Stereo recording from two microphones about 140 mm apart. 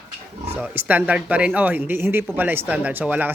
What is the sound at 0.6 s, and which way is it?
A man's voice, 10° right (ahead or behind).